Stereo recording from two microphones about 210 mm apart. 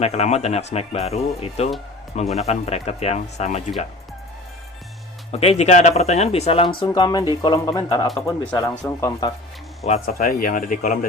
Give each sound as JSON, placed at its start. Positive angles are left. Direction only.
{"t": 0.0, "sound": "speech", "side_deg": 30}
{"t": 5.3, "sound": "speech", "side_deg": 30}
{"t": 8.0, "sound": "speech", "side_deg": 0}
{"t": 9.8, "sound": "speech", "side_deg": 30}
{"t": 10.2, "sound": "speech", "side_deg": 45}